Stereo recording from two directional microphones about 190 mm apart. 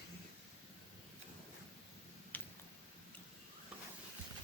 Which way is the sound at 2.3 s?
10° left (ahead or behind).